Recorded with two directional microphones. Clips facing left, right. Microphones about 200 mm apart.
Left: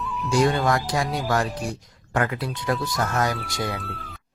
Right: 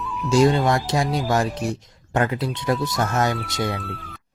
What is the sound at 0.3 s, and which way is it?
Speech, 25° right (ahead or behind).